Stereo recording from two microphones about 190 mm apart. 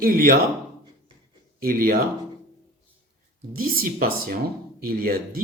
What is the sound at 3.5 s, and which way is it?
Speech, 50° right (ahead or behind).